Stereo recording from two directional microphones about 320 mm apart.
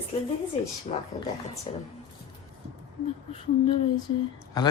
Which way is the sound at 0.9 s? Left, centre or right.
Left.